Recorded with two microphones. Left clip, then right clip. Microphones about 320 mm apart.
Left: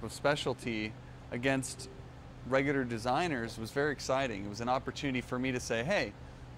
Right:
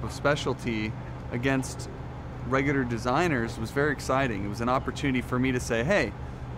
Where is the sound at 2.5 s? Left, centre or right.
Left.